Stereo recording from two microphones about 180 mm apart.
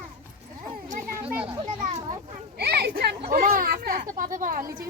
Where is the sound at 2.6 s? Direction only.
60° right (ahead or behind).